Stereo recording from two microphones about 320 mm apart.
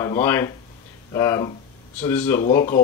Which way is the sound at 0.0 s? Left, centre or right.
Centre.